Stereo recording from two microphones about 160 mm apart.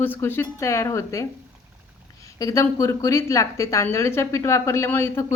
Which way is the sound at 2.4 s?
20° left (ahead or behind).